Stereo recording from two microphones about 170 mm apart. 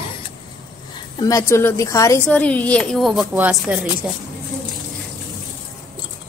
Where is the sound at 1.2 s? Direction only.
20° left (ahead or behind); by 4.2 s 5° right (ahead or behind).